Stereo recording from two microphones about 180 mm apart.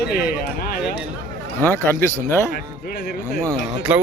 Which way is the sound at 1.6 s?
10° left (ahead or behind).